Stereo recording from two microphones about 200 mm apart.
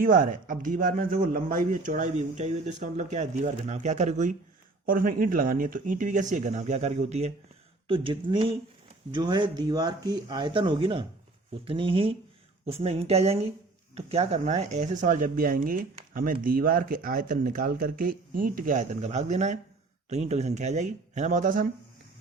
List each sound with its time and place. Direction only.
0.0 s a man's voice: 45° right (ahead or behind)